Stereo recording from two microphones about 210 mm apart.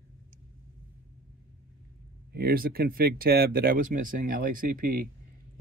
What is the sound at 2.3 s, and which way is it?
Speech, 45° right (ahead or behind).